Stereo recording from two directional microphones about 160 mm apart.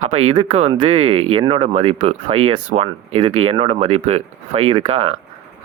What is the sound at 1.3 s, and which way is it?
Speech, 35° right (ahead or behind).